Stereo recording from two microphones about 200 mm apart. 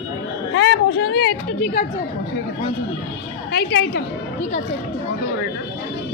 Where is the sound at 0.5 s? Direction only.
65° left (ahead or behind).